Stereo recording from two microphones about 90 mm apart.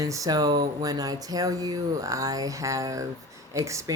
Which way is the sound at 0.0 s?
40° right (ahead or behind).